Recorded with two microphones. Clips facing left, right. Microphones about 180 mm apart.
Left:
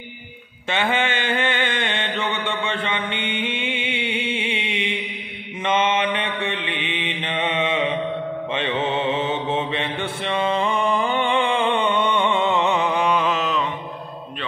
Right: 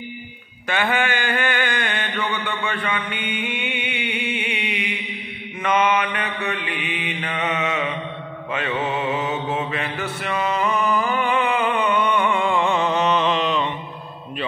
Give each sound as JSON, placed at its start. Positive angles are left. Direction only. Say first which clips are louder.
{"t": 0.7, "sound": "mantra", "louder": "even", "side_deg": 25}